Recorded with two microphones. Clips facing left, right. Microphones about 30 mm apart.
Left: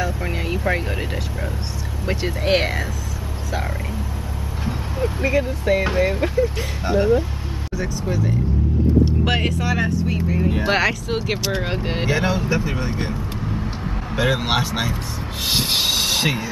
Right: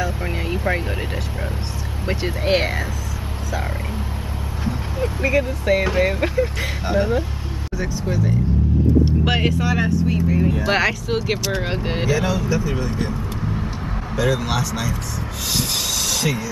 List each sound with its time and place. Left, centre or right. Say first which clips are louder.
0.0 s speech: even; centre
4.6 s speech: even; centre
12.1 s speech: even; left
14.1 s speech: left 1 dB; left